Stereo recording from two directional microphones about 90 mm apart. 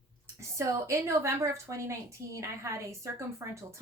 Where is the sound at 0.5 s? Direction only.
35° right (ahead or behind).